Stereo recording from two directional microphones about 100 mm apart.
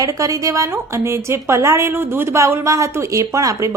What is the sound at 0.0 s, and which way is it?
A woman's voice, 35° right (ahead or behind).